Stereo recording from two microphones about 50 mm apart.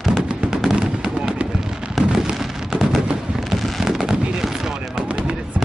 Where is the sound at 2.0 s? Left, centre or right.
Centre.